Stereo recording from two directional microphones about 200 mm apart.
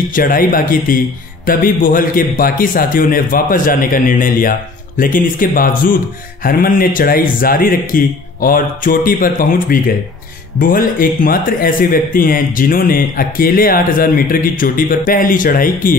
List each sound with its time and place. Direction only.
0.1 s speech: 45° left (ahead or behind)